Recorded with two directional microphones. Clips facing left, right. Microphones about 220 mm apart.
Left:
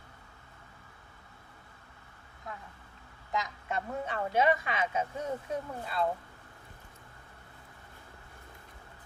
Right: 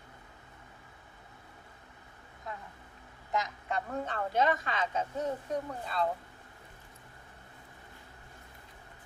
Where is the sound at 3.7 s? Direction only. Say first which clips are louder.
Even; 10° left (ahead or behind).